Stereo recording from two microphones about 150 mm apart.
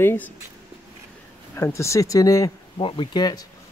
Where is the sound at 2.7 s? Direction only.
35° left (ahead or behind).